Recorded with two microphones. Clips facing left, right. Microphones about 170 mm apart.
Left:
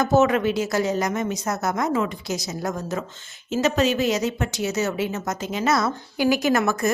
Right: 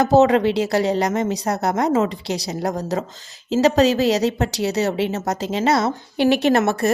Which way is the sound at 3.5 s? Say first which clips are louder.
Right 5 dB; 35° right (ahead or behind).